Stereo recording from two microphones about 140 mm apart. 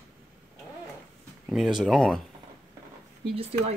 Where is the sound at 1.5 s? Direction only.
Centre (ahead or behind).